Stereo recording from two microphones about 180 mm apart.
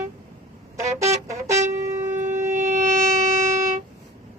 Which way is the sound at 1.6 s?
15° right (ahead or behind).